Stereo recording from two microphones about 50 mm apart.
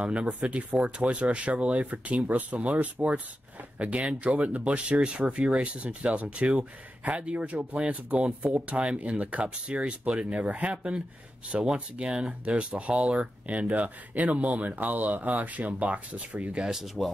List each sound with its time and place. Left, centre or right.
0.0 s speech: right
16.5 s speech: centre
16.8 s speech: centre